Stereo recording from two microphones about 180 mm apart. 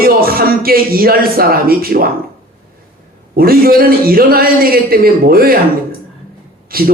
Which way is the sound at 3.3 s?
55° right (ahead or behind).